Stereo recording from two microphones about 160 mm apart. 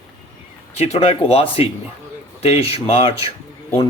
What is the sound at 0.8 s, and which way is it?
Speech, 40° left (ahead or behind).